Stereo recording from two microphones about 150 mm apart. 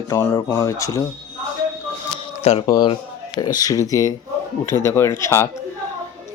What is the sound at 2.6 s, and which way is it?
Speech, 30° left (ahead or behind).